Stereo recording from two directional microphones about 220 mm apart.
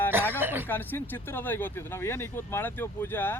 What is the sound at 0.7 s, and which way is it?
Speech, 10° left (ahead or behind).